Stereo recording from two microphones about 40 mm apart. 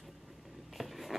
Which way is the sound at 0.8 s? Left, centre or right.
Centre.